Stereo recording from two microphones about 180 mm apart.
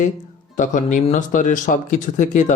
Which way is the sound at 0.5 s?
45° left (ahead or behind).